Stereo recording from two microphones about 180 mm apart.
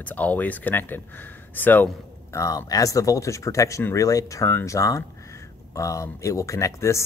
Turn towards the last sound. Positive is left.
turn(degrees=15)  # may be behind; listen again after turning